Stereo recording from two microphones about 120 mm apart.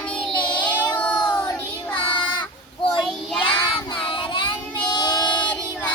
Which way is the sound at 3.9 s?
45° left (ahead or behind).